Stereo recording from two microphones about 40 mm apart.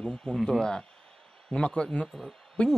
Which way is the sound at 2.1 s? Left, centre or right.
Centre.